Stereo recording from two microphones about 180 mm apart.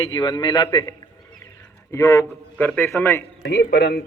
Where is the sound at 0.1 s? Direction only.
25° left (ahead or behind).